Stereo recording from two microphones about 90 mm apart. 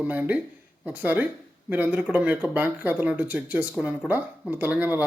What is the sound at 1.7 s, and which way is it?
Speech, 20° right (ahead or behind).